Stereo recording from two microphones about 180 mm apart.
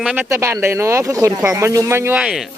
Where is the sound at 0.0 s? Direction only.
5° right (ahead or behind).